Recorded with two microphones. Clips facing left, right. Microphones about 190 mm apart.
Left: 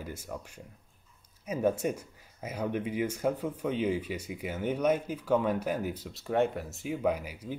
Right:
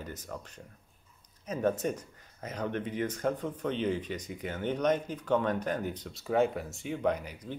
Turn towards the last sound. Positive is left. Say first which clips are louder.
# left 1 dB
turn(degrees=10)  # may be behind; listen again after turning